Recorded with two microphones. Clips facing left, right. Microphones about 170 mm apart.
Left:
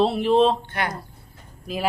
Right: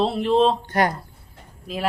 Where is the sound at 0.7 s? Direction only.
40° right (ahead or behind).